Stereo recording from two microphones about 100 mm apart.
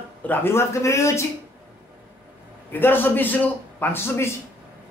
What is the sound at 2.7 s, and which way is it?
Speech, 20° left (ahead or behind).